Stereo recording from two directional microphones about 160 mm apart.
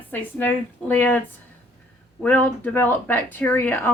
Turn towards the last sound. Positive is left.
turn(degrees=15)  # may be behind; listen again after turning